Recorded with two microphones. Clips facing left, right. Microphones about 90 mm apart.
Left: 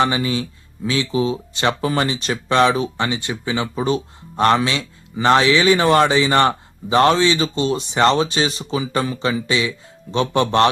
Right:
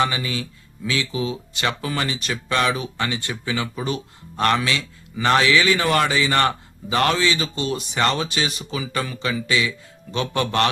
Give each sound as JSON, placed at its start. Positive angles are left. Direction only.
{"t": 0.0, "sound": "speech", "side_deg": 30}